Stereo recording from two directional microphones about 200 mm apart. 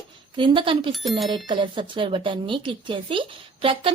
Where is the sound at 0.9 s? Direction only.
Centre (ahead or behind).